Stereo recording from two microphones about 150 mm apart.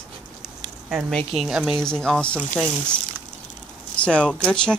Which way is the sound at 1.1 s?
Centre (ahead or behind).